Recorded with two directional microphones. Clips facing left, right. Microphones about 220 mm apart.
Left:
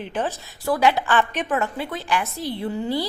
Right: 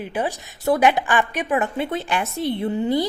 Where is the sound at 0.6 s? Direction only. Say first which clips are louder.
Right 2 dB; 20° right (ahead or behind).